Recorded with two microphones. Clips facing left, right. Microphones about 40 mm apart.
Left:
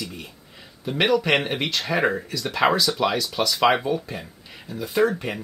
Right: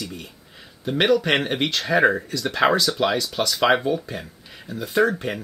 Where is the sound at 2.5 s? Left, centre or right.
Centre.